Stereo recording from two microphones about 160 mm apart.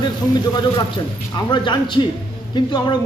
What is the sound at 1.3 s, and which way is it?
Speech, 30° left (ahead or behind).